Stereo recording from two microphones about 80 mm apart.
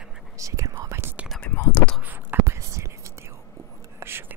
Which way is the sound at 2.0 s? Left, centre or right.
Right.